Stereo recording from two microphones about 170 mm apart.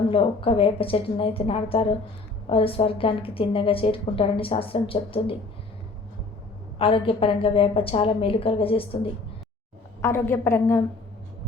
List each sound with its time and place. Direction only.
0.1 s a woman's voice: 30° left (ahead or behind)
6.7 s a woman's voice: 30° left (ahead or behind)
10.0 s a woman's voice: 15° left (ahead or behind)